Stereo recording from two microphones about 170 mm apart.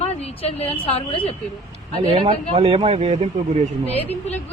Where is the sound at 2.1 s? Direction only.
35° right (ahead or behind).